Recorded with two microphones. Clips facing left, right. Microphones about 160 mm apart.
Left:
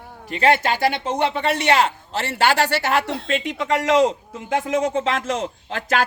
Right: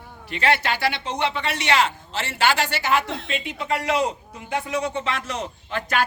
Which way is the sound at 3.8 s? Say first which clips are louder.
Left 8 dB; 90° left.